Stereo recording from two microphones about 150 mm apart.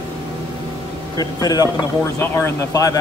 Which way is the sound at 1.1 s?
25° left (ahead or behind).